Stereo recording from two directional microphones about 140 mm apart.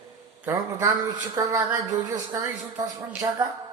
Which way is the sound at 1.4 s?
25° right (ahead or behind).